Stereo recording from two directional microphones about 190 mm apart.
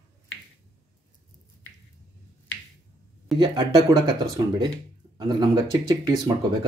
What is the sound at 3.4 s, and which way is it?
Speech, 20° right (ahead or behind).